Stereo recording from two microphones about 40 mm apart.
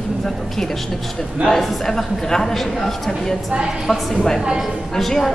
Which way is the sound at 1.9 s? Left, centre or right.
Centre.